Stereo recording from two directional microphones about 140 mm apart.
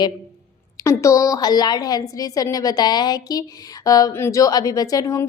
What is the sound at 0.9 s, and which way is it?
A woman's voice, 20° left (ahead or behind).